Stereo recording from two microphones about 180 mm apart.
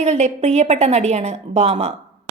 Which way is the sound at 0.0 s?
40° right (ahead or behind).